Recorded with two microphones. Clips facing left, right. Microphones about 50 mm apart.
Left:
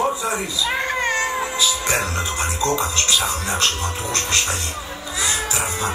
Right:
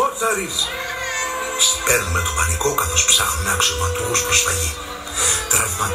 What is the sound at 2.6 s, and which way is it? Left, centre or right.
Speech, right.